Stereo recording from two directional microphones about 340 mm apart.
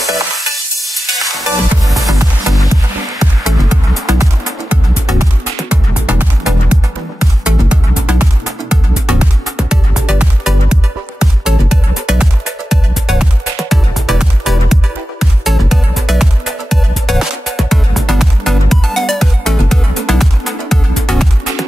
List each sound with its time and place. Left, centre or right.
0.9 s music: centre